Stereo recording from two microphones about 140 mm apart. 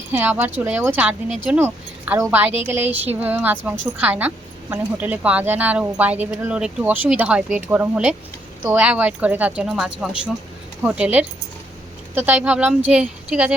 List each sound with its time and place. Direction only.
0.1 s speech: 15° right (ahead or behind)